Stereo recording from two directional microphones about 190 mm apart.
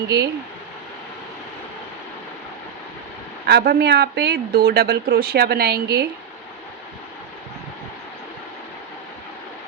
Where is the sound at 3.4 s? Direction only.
55° right (ahead or behind).